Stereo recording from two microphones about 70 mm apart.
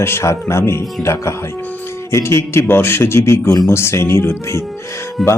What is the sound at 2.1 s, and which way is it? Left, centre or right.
Speech, left.